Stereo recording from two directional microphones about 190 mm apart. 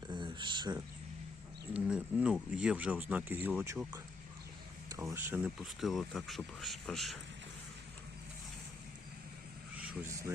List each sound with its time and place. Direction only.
0.1 s a sound: 25° right (ahead or behind)
1.7 s speech: 5° right (ahead or behind)
5.1 s speech: 10° right (ahead or behind)
9.7 s speech: 10° right (ahead or behind)